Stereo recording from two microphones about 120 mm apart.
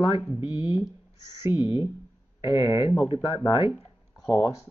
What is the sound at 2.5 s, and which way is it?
Speech, 45° left (ahead or behind).